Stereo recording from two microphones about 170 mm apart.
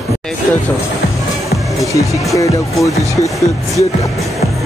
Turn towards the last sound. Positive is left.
turn(degrees=20)  # may be behind; listen again after turning